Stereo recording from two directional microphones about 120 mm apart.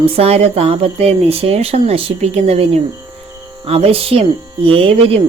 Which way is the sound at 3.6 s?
50° right (ahead or behind).